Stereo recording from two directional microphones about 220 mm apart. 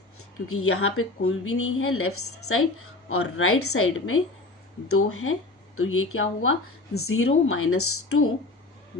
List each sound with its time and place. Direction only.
0.5 s speech: 75° left (ahead or behind)